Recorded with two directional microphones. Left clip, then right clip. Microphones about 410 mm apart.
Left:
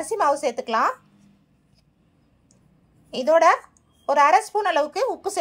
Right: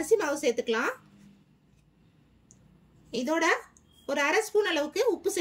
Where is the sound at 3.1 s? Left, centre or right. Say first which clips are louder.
Left 10 dB; centre.